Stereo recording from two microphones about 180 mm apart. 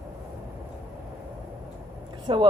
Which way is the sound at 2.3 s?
25° right (ahead or behind).